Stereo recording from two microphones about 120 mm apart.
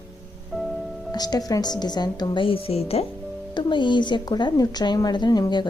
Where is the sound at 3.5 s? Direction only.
40° left (ahead or behind).